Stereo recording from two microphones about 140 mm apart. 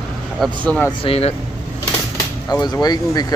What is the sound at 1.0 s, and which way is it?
Speech, 45° left (ahead or behind).